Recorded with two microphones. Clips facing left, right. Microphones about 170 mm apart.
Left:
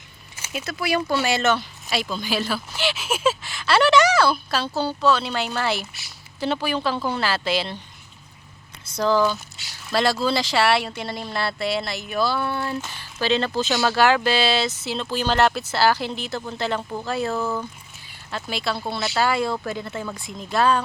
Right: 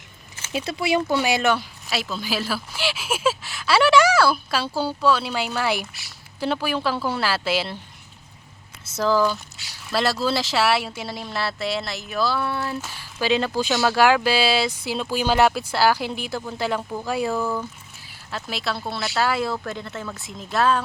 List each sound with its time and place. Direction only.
0.5 s speech: 30° right (ahead or behind); by 7.8 s 5° right (ahead or behind)
9.0 s speech: 5° right (ahead or behind)